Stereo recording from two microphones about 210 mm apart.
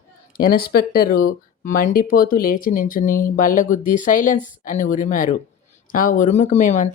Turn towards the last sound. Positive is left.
turn(degrees=35)  # may be behind; listen again after turning